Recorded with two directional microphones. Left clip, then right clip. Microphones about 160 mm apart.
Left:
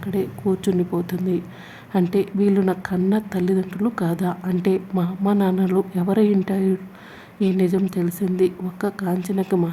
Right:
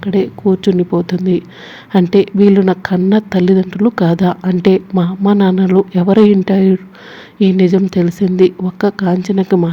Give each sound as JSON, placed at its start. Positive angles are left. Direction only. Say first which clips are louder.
{"t": 0.0, "sound": "a woman's voice", "louder": "right 10 dB", "side_deg": -25}